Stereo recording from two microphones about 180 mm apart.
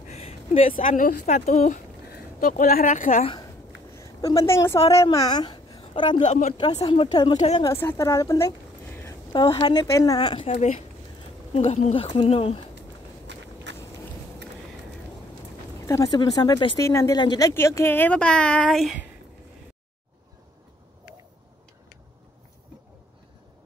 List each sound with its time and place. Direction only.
0.9 s a woman's voice: 50° left (ahead or behind)
2.0 s a woman's voice: 50° left (ahead or behind)
3.9 s a woman's voice: 20° left (ahead or behind)
4.7 s speech: 35° left (ahead or behind)
5.1 s a woman's voice: 20° left (ahead or behind)
6.2 s speech: 40° left (ahead or behind)
6.5 s speech: 25° left (ahead or behind)
7.6 s a woman's voice: 15° left (ahead or behind)
10.5 s a woman's voice: 40° left (ahead or behind)
13.7 s vehicle: 75° right (ahead or behind)
15.9 s a woman's voice: 20° left (ahead or behind); by 19.0 s centre (ahead or behind)